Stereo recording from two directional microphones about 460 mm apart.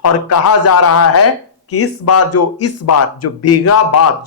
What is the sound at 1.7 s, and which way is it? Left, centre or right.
Speech, left.